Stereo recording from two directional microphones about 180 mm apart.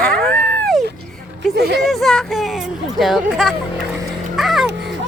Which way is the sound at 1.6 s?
65° right (ahead or behind).